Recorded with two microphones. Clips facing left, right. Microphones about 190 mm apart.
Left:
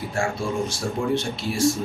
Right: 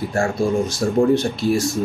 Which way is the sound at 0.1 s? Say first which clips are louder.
Right 6 dB; 40° right (ahead or behind).